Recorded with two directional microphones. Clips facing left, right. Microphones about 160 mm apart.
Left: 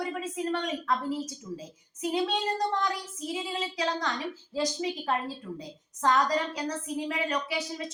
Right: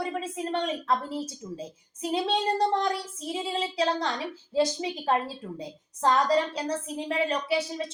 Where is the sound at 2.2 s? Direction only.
30° right (ahead or behind).